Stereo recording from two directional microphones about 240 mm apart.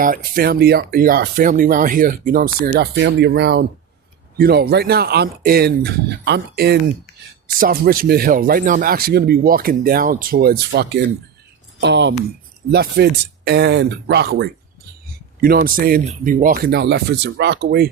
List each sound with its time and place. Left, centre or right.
0.0 s speech: right